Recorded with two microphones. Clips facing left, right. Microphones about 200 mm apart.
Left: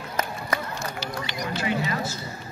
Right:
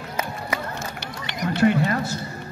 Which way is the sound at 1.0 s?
60° right (ahead or behind).